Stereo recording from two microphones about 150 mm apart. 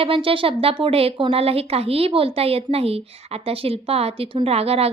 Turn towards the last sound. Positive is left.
turn(degrees=-40)  # may be behind; listen again after turning